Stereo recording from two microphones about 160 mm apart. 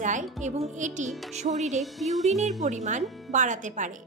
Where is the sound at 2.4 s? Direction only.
50° right (ahead or behind).